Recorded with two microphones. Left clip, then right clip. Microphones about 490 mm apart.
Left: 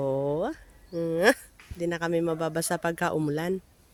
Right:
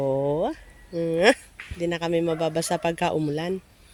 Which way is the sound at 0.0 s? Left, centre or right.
Left.